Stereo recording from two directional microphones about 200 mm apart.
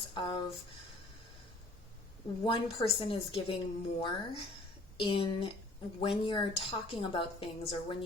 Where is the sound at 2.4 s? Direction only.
25° left (ahead or behind).